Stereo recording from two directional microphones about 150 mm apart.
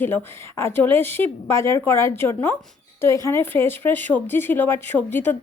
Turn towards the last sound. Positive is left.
turn(degrees=10)  # may be behind; listen again after turning